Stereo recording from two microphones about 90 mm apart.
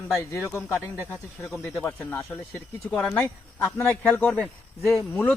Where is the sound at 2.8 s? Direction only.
15° left (ahead or behind).